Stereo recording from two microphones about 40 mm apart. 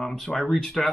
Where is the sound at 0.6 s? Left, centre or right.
Centre.